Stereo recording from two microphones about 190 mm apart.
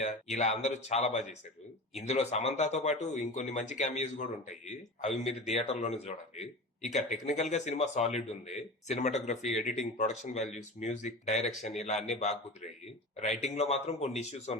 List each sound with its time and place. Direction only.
0.0 s speech: 40° left (ahead or behind)
13.2 s speech: 35° left (ahead or behind)